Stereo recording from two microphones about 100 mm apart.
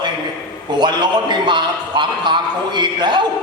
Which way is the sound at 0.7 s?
50° right (ahead or behind).